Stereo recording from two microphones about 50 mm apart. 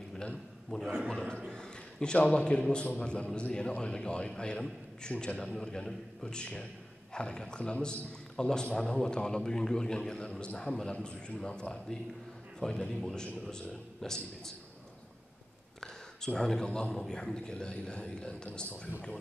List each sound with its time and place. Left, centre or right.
0.1 s a sound: centre
1.0 s a man's voice: centre
16.3 s a man's voice: centre